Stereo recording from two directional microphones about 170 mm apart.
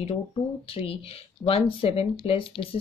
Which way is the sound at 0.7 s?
35° left (ahead or behind).